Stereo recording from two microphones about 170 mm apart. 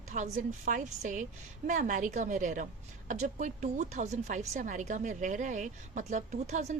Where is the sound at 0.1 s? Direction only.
50° right (ahead or behind).